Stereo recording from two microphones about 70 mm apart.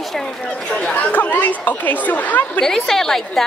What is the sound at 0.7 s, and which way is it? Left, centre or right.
Speech, left.